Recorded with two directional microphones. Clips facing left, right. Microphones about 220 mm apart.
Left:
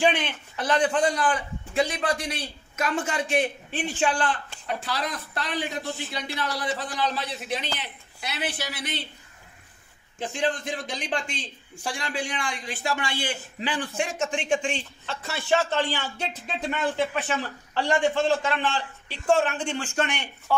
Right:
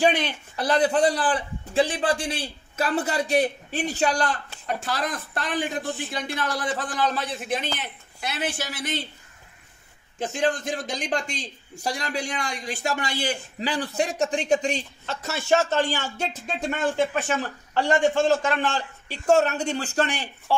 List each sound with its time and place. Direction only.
0.0 s a man's voice: 40° right (ahead or behind)
10.2 s speech: 45° right (ahead or behind)